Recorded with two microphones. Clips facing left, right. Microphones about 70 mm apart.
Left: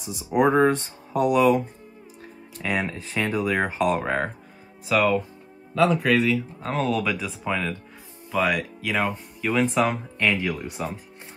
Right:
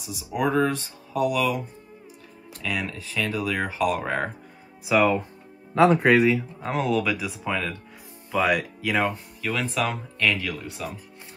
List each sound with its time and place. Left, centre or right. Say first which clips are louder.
0.0 s speech: left 5 dB; left
2.6 s speech: left 3 dB; left
3.8 s speech: even; centre
4.8 s speech: right 1 dB; centre
5.8 s speech: right 3 dB; right
6.1 s speech: right 2 dB; right
6.6 s speech: right 1 dB; centre
9.8 s speech: left 3 dB; centre